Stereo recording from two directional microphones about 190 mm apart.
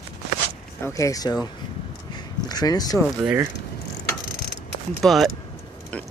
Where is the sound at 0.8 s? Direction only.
15° left (ahead or behind).